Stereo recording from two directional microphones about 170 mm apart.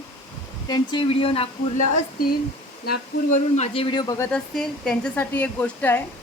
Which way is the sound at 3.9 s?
25° left (ahead or behind).